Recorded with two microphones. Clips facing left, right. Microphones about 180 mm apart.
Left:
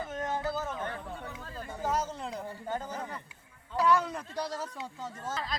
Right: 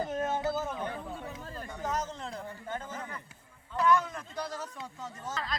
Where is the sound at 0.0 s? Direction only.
30° right (ahead or behind); by 0.9 s 15° right (ahead or behind).